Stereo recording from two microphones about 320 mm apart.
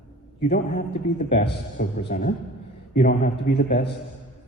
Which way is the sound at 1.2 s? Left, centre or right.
Left.